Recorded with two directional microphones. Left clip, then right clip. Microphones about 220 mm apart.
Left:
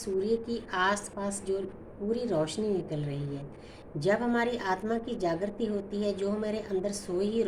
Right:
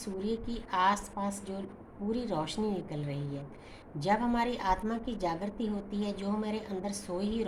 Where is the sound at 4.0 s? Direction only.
25° right (ahead or behind).